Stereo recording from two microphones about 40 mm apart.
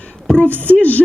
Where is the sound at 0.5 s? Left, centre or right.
Left.